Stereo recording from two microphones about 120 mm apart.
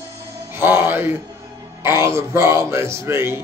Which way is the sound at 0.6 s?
20° right (ahead or behind).